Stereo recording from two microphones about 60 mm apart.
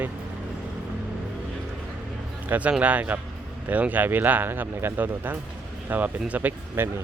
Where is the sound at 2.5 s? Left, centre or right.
Right.